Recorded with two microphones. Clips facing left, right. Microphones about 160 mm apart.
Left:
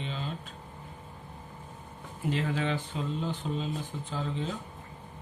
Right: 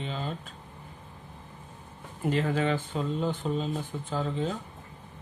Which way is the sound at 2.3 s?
50° right (ahead or behind).